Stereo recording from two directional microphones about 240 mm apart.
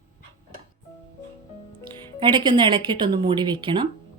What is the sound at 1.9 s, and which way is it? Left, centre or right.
Speech, centre.